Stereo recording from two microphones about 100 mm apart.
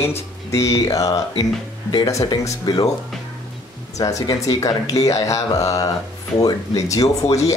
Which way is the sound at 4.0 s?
35° left (ahead or behind).